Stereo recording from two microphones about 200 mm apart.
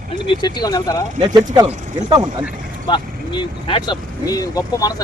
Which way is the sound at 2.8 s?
25° left (ahead or behind).